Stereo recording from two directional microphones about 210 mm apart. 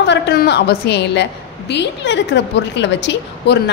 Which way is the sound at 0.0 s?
50° left (ahead or behind).